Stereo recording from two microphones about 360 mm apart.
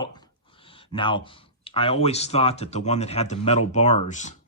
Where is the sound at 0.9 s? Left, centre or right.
Centre.